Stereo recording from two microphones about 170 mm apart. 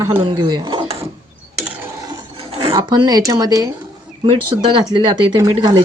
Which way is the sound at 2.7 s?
25° right (ahead or behind).